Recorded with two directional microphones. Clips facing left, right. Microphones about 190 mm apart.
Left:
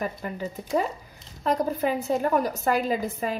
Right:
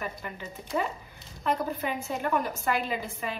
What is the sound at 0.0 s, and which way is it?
A woman's voice, 40° left (ahead or behind).